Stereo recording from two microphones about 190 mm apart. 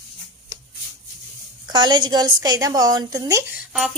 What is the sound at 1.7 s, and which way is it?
A woman's voice, 20° right (ahead or behind).